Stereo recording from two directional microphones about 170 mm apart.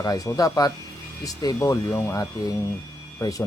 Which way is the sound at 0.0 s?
20° left (ahead or behind).